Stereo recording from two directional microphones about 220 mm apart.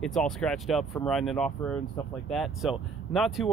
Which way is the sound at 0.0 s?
5° left (ahead or behind).